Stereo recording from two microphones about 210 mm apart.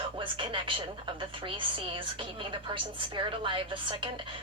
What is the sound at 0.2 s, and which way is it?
A woman's voice, 25° right (ahead or behind).